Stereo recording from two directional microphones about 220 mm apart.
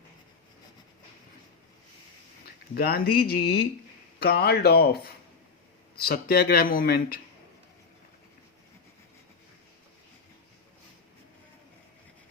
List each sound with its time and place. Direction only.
2.7 s speech: 45° left (ahead or behind)